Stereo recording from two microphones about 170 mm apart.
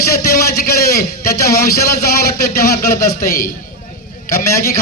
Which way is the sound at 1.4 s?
65° left (ahead or behind).